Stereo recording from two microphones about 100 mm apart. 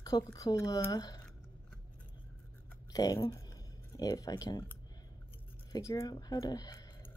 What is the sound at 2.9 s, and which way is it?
Speech, 40° left (ahead or behind).